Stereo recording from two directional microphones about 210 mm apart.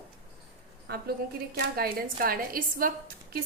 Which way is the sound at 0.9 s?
50° right (ahead or behind).